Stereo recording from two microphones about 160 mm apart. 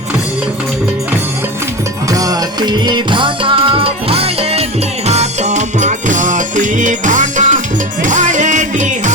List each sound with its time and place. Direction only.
2.0 s music: 20° right (ahead or behind); by 9.1 s 50° right (ahead or behind)